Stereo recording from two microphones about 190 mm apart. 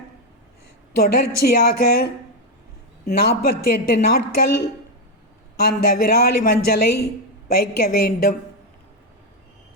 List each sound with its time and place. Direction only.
0.9 s a woman's voice: 55° left (ahead or behind)
3.1 s a woman's voice: 55° left (ahead or behind)
5.5 s a woman's voice: 55° left (ahead or behind)